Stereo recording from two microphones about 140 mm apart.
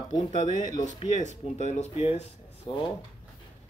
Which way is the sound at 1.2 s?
55° left (ahead or behind).